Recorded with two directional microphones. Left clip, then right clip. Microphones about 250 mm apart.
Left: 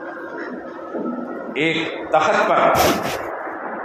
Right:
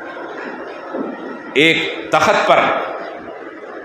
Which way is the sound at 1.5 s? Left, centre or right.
Right.